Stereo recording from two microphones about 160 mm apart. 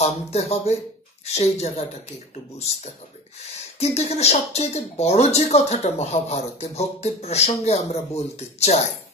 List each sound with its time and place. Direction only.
0.0 s speech: 40° left (ahead or behind)
3.8 s speech: 40° left (ahead or behind)